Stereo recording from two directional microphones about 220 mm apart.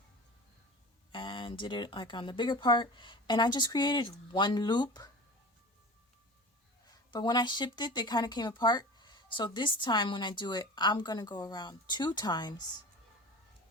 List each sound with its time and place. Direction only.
1.1 s speech: 20° left (ahead or behind)
7.1 s speech: 20° left (ahead or behind)